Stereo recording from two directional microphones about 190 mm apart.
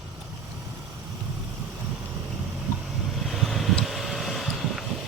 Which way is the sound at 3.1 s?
Centre (ahead or behind).